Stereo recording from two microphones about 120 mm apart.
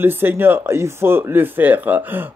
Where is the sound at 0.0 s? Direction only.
20° right (ahead or behind).